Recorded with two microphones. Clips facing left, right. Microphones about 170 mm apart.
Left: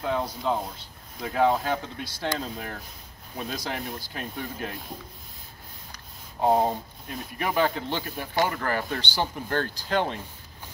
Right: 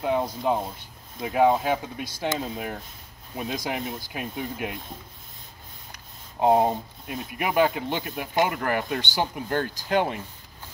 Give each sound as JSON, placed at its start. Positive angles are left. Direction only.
{"t": 0.0, "sound": "speech", "side_deg": -20}
{"t": 6.4, "sound": "speech", "side_deg": -15}